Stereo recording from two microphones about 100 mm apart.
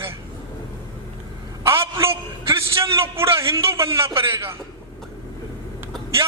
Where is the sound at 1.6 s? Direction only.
25° right (ahead or behind).